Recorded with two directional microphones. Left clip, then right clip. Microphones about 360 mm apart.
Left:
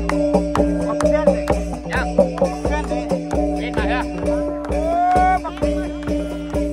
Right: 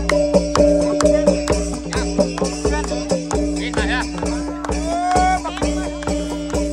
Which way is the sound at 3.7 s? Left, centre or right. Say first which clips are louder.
Right 1 dB; left.